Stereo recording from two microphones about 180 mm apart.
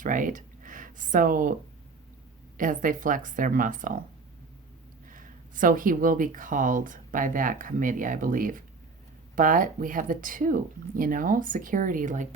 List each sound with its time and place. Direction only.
0.0 s speech: 45° right (ahead or behind)
2.6 s speech: 50° right (ahead or behind)
5.0 s speech: 50° right (ahead or behind)